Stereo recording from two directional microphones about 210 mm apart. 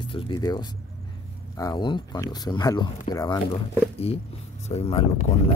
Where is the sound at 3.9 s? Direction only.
30° left (ahead or behind).